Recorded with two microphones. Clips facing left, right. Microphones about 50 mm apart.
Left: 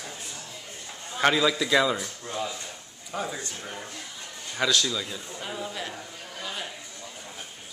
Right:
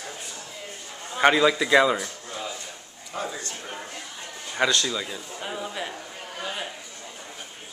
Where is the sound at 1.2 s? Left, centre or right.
Centre.